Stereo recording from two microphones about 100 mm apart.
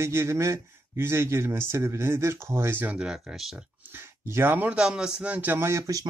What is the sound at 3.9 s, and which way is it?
Speech, 25° right (ahead or behind).